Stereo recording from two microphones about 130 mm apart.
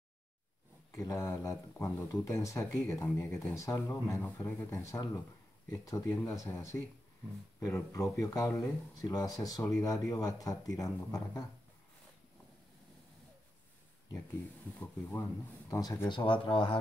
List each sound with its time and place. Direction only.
0.9 s speech: 20° left (ahead or behind)
14.8 s speech: 20° left (ahead or behind)
16.3 s speech: 40° left (ahead or behind)